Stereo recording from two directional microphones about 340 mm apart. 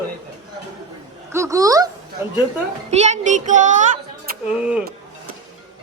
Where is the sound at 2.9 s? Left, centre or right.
Centre.